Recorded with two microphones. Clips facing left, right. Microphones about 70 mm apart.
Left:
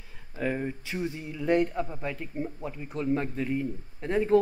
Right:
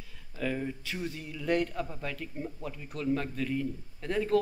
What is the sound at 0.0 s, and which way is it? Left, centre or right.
Speech, left.